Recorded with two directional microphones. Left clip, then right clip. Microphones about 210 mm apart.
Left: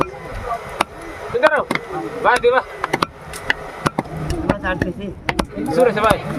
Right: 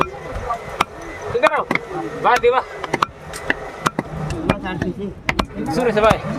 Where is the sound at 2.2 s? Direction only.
20° right (ahead or behind).